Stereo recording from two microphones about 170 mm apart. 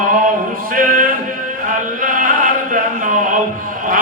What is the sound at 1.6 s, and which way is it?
Chant, 50° right (ahead or behind).